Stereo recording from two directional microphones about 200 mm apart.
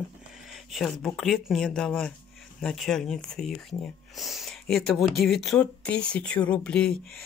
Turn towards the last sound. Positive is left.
turn(degrees=5)  # may be behind; listen again after turning